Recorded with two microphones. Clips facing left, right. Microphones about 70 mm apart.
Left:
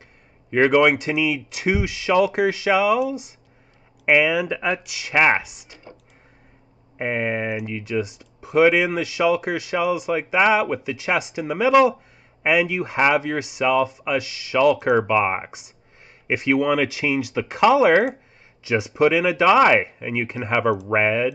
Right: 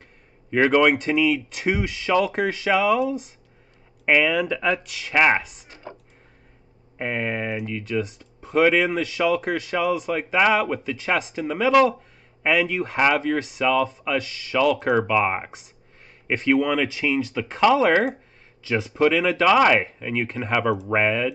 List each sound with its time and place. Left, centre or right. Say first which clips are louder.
0.5 s speech: left 1 dB; centre
7.0 s speech: left 3 dB; centre